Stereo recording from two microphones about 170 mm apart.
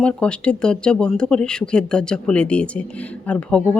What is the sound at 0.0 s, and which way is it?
Speech, 5° left (ahead or behind).